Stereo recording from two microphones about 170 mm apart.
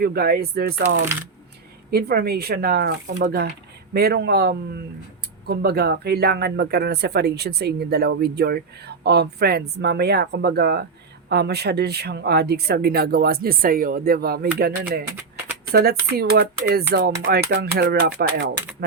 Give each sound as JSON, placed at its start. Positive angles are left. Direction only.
{"t": 0.0, "sound": "speech", "side_deg": -65}
{"t": 1.9, "sound": "speech", "side_deg": -65}